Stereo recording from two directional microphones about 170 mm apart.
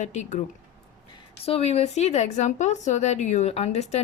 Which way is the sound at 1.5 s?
35° left (ahead or behind).